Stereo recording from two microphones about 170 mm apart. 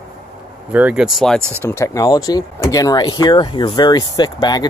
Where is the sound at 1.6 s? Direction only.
15° left (ahead or behind).